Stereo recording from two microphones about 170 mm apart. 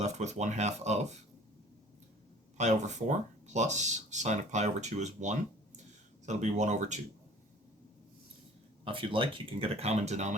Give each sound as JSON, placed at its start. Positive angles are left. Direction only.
{"t": 0.0, "sound": "speech", "side_deg": -40}
{"t": 2.6, "sound": "speech", "side_deg": -45}
{"t": 8.8, "sound": "speech", "side_deg": -30}